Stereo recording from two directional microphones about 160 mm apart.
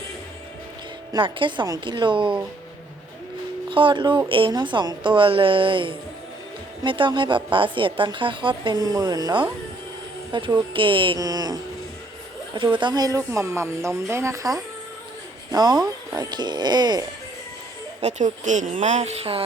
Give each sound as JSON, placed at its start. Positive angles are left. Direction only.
{"t": 1.1, "sound": "speech", "side_deg": -30}
{"t": 3.7, "sound": "speech", "side_deg": -30}
{"t": 18.0, "sound": "speech", "side_deg": -50}